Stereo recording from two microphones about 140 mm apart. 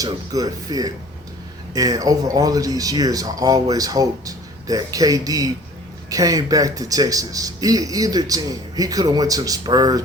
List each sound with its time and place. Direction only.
0.0 s a man's voice: 25° right (ahead or behind)